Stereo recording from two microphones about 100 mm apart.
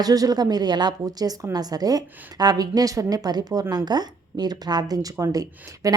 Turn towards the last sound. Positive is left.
turn(degrees=-35)  # may be behind; listen again after turning